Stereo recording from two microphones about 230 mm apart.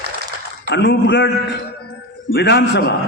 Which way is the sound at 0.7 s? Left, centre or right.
Left.